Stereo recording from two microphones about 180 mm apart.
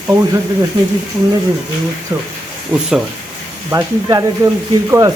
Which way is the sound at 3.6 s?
15° right (ahead or behind).